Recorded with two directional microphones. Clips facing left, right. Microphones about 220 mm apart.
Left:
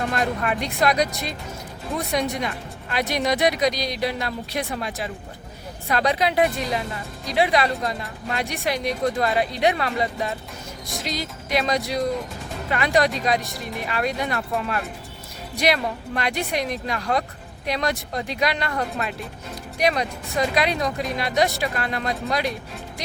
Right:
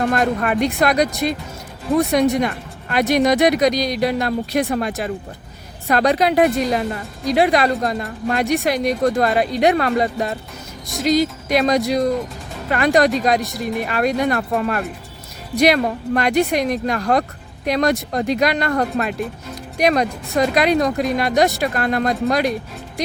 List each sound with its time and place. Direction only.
0.1 s speech: 55° right (ahead or behind)